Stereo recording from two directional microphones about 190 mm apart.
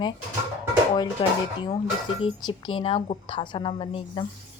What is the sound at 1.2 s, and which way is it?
Speech, 25° left (ahead or behind).